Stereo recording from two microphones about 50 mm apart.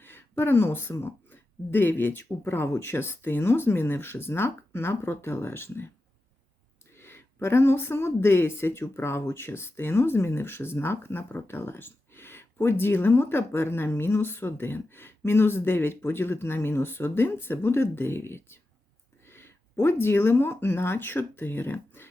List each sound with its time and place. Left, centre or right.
0.0 s speech: left
6.9 s speech: left
19.3 s a sound: left
19.8 s speech: left